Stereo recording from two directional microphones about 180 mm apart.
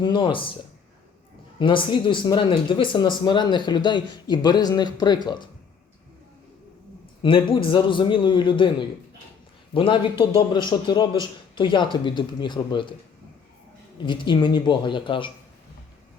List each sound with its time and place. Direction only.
0.0 s speech: 25° left (ahead or behind)
1.5 s speech: 25° left (ahead or behind)
7.2 s speech: 30° left (ahead or behind)
14.0 s speech: 25° left (ahead or behind)